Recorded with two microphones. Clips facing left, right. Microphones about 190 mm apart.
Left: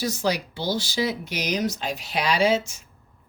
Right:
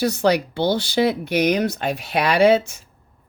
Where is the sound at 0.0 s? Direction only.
60° right (ahead or behind).